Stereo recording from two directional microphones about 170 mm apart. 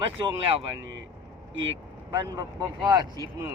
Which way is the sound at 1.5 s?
90° right.